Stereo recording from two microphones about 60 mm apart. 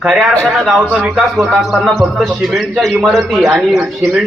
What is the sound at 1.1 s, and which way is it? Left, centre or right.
A man's voice, centre.